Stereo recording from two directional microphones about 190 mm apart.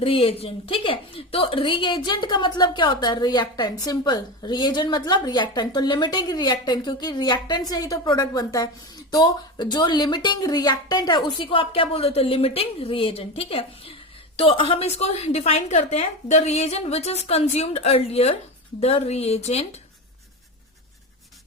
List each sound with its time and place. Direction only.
0.0 s a woman's voice: 30° left (ahead or behind)